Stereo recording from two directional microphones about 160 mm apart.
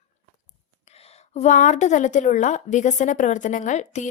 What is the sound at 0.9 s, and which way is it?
A woman's voice, 40° left (ahead or behind).